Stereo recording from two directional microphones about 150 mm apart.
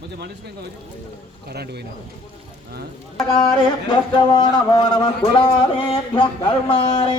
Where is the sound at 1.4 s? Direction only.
90° right.